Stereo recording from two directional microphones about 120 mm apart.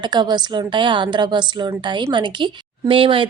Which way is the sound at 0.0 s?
40° right (ahead or behind).